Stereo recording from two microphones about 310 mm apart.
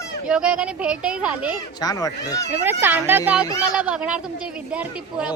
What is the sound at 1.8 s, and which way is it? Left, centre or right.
Speech, centre.